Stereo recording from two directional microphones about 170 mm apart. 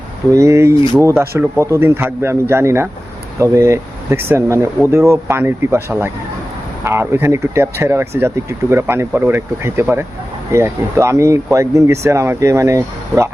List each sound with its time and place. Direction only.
0.3 s speech: 15° right (ahead or behind)